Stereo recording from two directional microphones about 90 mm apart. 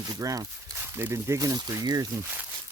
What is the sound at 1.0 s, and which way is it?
Speech, 30° right (ahead or behind).